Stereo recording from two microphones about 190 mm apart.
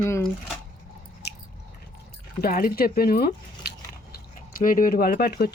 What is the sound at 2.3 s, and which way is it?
Speech, 50° left (ahead or behind).